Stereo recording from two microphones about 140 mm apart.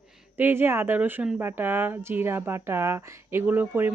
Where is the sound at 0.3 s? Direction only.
15° right (ahead or behind).